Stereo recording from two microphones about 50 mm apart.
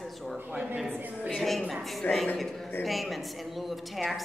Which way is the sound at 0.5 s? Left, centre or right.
Right.